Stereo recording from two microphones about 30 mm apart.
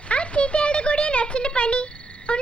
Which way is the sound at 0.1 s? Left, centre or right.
Left.